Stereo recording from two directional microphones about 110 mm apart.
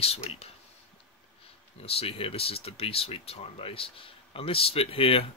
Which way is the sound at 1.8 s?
60° left (ahead or behind).